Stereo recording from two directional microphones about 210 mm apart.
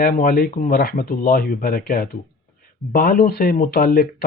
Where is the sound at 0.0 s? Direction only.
45° left (ahead or behind).